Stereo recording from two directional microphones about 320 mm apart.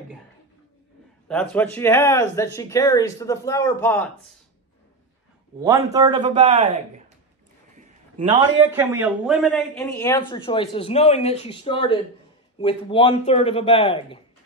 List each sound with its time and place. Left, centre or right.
1.3 s a man's voice: centre
5.6 s a man's voice: centre
8.2 s a man's voice: centre